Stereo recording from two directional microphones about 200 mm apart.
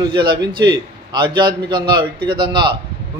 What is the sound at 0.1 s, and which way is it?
Speech, 25° right (ahead or behind).